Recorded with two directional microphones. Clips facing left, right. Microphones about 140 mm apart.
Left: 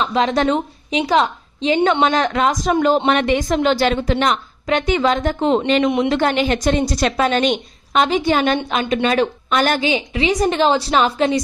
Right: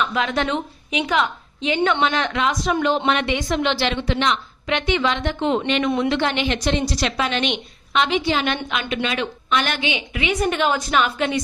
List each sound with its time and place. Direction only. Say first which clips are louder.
0.0 s a woman's voice: left 5 dB; 35° left (ahead or behind)
8.6 s a woman's voice: left 6 dB; 40° left (ahead or behind)